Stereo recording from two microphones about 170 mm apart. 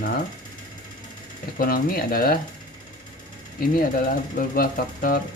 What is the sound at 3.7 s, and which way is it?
Speech, 60° left (ahead or behind).